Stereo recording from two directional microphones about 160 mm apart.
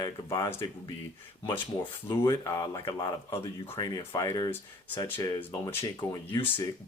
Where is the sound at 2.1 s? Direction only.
15° left (ahead or behind).